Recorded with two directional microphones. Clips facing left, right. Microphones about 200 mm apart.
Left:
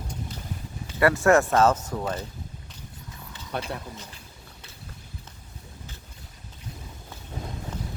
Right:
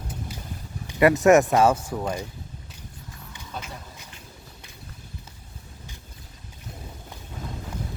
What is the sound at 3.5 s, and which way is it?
Speech, 70° left (ahead or behind).